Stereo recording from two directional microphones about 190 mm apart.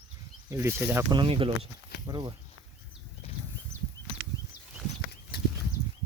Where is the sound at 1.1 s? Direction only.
30° right (ahead or behind).